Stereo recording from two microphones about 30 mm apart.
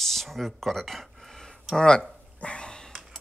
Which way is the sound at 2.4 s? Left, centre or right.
Left.